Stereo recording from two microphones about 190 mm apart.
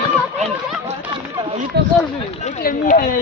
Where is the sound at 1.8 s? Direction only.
65° right (ahead or behind).